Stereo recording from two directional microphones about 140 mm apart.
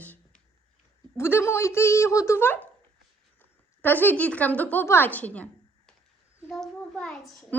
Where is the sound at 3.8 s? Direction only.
15° left (ahead or behind).